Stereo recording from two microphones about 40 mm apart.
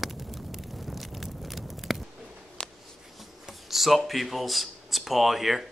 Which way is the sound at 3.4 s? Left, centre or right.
Centre.